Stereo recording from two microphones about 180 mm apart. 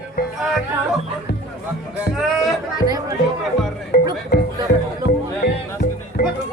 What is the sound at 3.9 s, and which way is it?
Music, 60° left (ahead or behind).